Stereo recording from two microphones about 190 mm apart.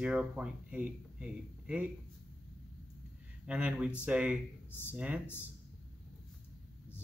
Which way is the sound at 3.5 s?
5° right (ahead or behind).